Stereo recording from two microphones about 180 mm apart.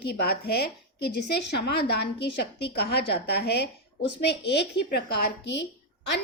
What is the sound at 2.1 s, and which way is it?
A woman's voice, 65° left (ahead or behind).